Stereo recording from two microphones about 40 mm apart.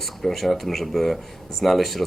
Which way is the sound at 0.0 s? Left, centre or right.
Centre.